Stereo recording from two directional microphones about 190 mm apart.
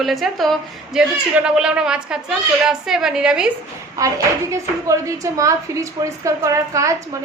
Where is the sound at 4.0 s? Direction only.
15° right (ahead or behind).